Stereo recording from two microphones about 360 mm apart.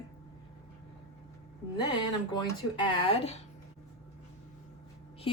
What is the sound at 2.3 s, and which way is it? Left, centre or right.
A woman's voice, centre.